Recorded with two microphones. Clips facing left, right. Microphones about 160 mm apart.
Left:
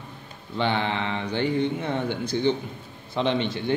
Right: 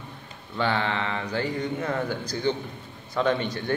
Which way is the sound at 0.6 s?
25° left (ahead or behind).